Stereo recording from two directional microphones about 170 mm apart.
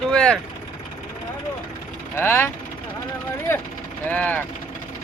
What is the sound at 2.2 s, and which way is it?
Speech, 15° left (ahead or behind).